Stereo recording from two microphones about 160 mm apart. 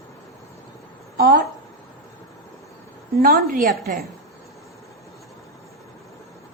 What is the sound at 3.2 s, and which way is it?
Speech, 70° right (ahead or behind).